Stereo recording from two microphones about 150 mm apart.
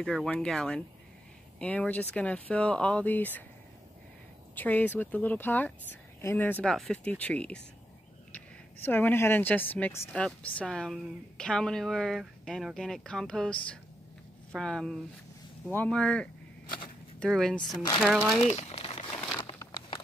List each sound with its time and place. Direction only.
0.0 s a woman's voice: 5° left (ahead or behind)
4.6 s a woman's voice: 10° left (ahead or behind)
18.4 s crumpling: 45° left (ahead or behind)
19.6 s a sound: 30° left (ahead or behind)